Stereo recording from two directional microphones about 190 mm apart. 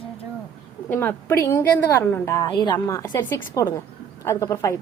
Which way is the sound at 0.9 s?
10° left (ahead or behind).